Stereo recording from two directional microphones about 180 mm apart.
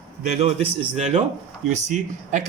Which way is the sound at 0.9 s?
35° right (ahead or behind).